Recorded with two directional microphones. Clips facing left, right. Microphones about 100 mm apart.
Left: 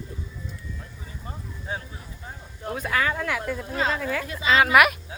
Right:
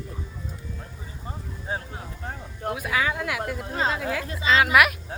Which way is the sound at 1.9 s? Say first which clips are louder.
Right 5 dB; 65° right (ahead or behind).